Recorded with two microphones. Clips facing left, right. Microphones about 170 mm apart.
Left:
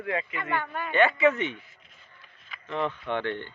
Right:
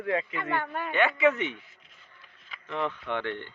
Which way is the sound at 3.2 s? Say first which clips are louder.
Left 2 dB; 10° right (ahead or behind).